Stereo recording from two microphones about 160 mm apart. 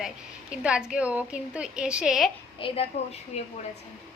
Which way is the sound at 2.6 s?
40° left (ahead or behind).